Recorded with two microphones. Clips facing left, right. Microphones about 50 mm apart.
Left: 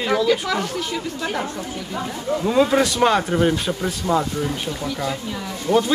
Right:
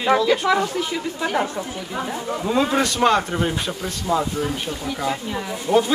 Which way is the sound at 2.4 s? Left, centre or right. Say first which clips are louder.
Left 3 dB; centre.